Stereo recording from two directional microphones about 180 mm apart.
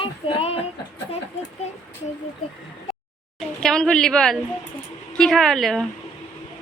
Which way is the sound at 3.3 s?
5° left (ahead or behind).